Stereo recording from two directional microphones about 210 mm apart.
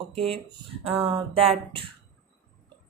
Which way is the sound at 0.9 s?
25° right (ahead or behind).